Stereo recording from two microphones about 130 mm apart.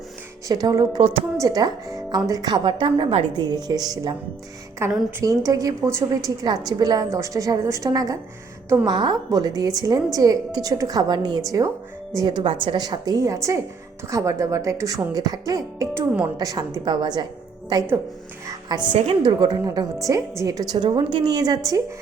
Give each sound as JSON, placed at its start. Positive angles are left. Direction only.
{"t": 0.4, "sound": "a woman's voice", "side_deg": -30}
{"t": 18.4, "sound": "music", "side_deg": -30}
{"t": 18.9, "sound": "a woman's voice", "side_deg": -50}
{"t": 19.4, "sound": "a woman's voice", "side_deg": -35}